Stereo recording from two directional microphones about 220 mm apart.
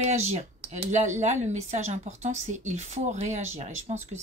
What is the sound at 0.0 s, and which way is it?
Speech, 30° right (ahead or behind).